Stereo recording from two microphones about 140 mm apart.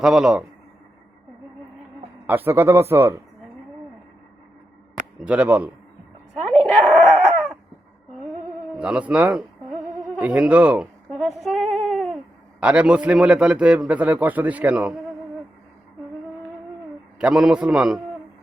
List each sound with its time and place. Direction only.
0.0 s a man's voice: 5° right (ahead or behind)
2.2 s a man's voice: 15° right (ahead or behind)
5.2 s a man's voice: 10° right (ahead or behind)
6.4 s a sound: centre (ahead or behind)
8.7 s a man's voice: 5° right (ahead or behind)
11.1 s a sound: centre (ahead or behind)
12.5 s a man's voice: 10° right (ahead or behind)
17.2 s a man's voice: 5° right (ahead or behind)